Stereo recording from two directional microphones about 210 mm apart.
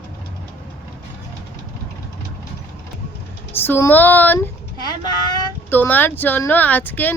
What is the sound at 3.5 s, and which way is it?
Speech, 10° left (ahead or behind).